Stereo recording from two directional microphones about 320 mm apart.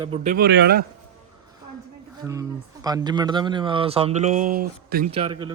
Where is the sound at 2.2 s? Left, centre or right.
Centre.